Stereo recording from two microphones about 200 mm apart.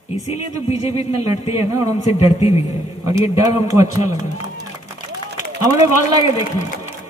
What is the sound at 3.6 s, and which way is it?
Music, 15° right (ahead or behind).